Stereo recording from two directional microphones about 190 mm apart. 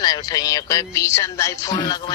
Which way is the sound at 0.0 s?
20° left (ahead or behind).